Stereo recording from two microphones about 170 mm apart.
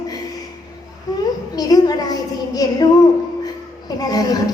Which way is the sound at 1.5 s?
20° left (ahead or behind).